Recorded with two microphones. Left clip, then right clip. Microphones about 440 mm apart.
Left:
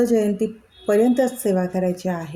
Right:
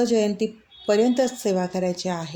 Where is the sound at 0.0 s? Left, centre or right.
Left.